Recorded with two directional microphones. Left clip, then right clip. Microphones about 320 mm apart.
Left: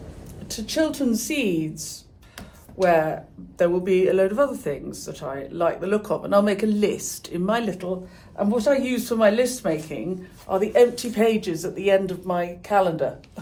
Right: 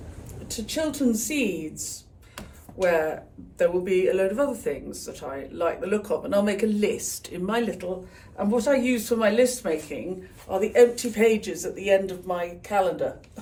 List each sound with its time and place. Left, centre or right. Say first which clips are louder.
0.4 s speech: left 4 dB; centre